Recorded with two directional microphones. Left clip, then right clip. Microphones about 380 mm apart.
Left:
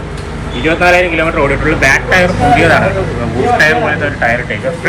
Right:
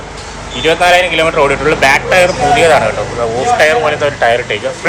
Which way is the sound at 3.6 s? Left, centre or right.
Centre.